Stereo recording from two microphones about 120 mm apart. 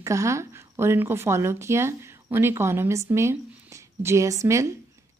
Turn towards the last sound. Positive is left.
turn(degrees=-25)  # may be behind; listen again after turning